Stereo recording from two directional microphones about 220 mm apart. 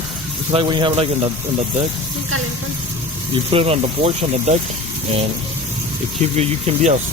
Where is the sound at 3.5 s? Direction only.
25° right (ahead or behind).